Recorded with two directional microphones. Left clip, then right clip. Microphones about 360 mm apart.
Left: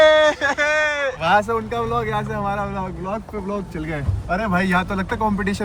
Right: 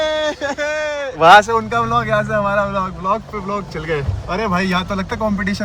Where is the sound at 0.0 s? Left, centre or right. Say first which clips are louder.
Left 5 dB; centre.